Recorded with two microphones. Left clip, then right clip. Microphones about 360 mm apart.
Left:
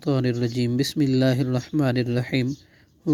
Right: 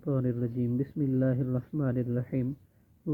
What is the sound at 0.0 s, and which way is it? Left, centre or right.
Speech, centre.